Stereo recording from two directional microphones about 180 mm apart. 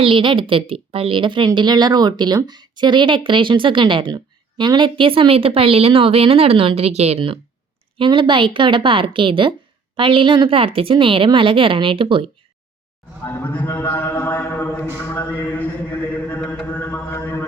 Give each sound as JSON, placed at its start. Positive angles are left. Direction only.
{"t": 0.0, "sound": "a woman's voice", "side_deg": -30}
{"t": 13.2, "sound": "a man's voice", "side_deg": 10}
{"t": 15.1, "sound": "a sound", "side_deg": 15}